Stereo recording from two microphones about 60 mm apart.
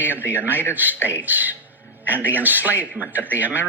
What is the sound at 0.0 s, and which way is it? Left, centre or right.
Speech, right.